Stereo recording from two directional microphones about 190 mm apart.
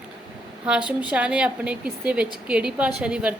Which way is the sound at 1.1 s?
5° right (ahead or behind).